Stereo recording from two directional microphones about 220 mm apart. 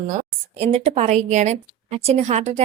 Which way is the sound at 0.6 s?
30° right (ahead or behind).